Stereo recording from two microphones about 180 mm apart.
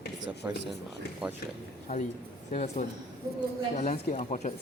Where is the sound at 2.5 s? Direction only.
40° left (ahead or behind).